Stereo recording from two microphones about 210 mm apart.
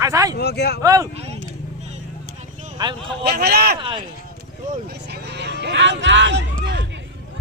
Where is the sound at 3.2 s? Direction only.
50° right (ahead or behind).